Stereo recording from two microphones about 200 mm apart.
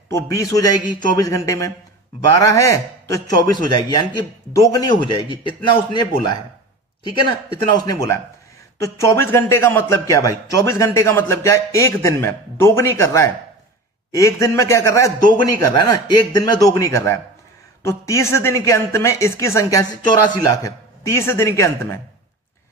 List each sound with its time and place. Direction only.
0.1 s a man's voice: 15° left (ahead or behind)
7.7 s a man's voice: 20° left (ahead or behind)